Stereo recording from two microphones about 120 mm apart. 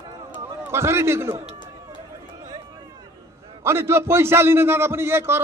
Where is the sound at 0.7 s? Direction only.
20° right (ahead or behind).